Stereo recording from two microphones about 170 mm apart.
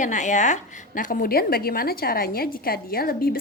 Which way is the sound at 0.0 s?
45° left (ahead or behind).